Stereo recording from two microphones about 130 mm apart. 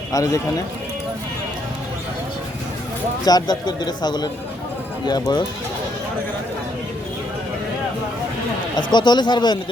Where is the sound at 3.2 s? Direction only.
30° left (ahead or behind).